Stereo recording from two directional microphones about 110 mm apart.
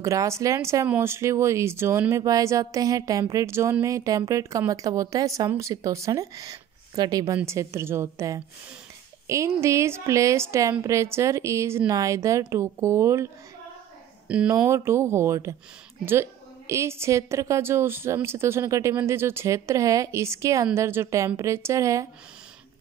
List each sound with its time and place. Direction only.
0.0 s a woman's voice: 30° right (ahead or behind)
14.2 s speech: 10° right (ahead or behind)
14.5 s a woman's voice: 25° right (ahead or behind)